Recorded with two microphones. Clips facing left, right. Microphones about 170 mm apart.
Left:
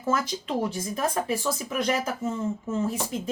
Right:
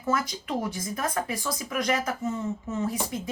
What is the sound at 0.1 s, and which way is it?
Speech, 30° left (ahead or behind).